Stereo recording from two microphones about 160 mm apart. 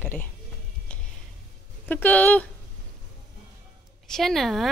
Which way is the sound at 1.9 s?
10° left (ahead or behind).